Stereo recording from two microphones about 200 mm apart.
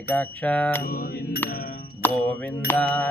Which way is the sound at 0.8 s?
45° left (ahead or behind).